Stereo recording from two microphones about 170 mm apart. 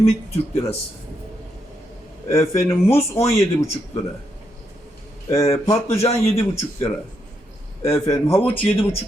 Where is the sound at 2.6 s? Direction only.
15° left (ahead or behind).